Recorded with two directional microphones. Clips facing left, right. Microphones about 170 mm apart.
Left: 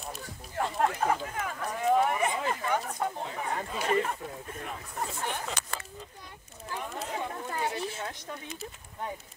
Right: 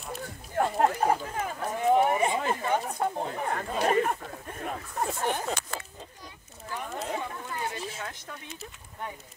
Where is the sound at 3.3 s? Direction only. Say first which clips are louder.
Right 3 dB; 50° right (ahead or behind).